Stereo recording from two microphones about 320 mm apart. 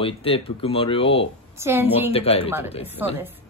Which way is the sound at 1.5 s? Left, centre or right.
Centre.